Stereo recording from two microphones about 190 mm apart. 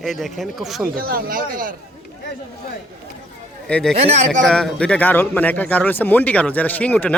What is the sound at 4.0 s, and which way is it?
Speech, 35° right (ahead or behind).